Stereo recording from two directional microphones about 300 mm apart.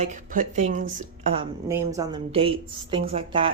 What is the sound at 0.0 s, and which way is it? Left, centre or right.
Speech, right.